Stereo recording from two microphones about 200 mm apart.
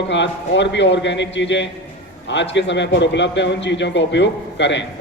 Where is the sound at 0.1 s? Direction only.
65° left (ahead or behind).